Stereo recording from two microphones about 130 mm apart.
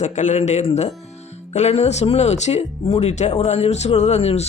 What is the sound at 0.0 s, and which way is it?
Speech, 65° left (ahead or behind).